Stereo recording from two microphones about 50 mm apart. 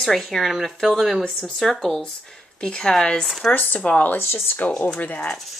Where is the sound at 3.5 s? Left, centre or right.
Left.